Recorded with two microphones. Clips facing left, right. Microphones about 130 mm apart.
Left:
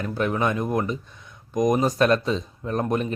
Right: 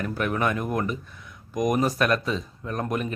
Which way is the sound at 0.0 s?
25° left (ahead or behind).